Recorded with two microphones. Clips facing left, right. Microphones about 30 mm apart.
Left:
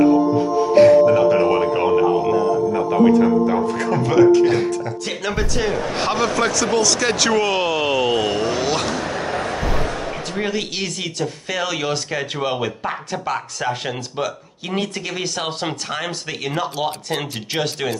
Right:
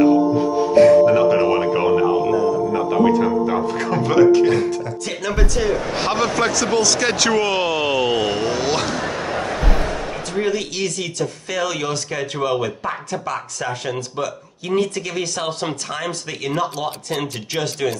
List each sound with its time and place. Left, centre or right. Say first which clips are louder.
0.7 s music: even; centre
1.0 s speech: even; centre
2.2 s speech: even; centre
2.7 s speech: left 3 dB; centre
4.5 s speech: even; centre
5.9 s speech: even; centre
9.7 s music: even; centre
10.4 s speech: right 2 dB; centre